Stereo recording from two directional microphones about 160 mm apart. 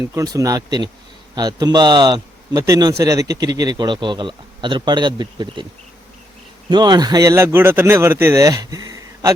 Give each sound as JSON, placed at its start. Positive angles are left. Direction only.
{"t": 0.0, "sound": "speech", "side_deg": -20}
{"t": 6.7, "sound": "speech", "side_deg": -25}